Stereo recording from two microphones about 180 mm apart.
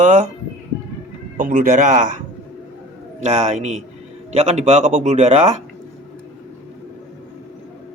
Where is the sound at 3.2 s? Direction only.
40° right (ahead or behind).